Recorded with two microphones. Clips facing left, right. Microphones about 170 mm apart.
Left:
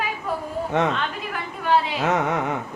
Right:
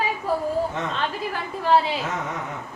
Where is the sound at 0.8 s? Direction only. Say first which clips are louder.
Left 8 dB; 70° left (ahead or behind).